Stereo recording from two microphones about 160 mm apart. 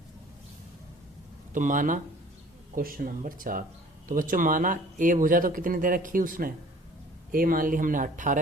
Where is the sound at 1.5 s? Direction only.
55° right (ahead or behind).